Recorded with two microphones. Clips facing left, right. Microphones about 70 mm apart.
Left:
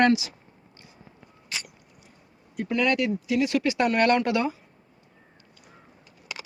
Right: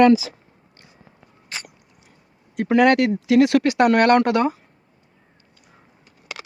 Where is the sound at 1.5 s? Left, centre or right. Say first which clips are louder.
Right 2 dB; right.